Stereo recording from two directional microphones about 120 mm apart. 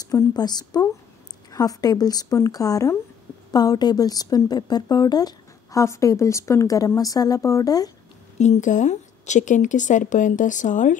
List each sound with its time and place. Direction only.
0.0 s a woman's voice: 35° left (ahead or behind)
8.4 s speech: 80° left